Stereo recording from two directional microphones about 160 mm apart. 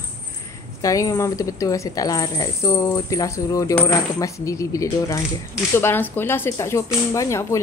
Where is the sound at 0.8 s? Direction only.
20° left (ahead or behind).